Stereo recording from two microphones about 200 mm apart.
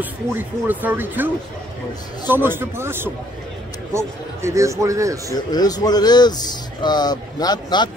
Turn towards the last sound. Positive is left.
turn(degrees=20)  # may be behind; listen again after turning